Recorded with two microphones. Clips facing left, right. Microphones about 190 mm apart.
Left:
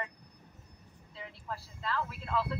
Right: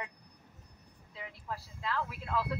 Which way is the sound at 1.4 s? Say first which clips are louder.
Even; 10° right (ahead or behind).